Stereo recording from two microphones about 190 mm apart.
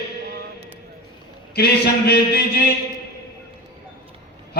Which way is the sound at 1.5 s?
55° left (ahead or behind).